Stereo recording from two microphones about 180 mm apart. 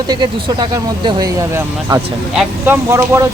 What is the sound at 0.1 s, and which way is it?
Speech, 25° right (ahead or behind).